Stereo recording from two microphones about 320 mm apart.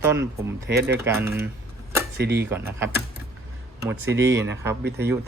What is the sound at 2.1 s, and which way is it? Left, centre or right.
Speech, right.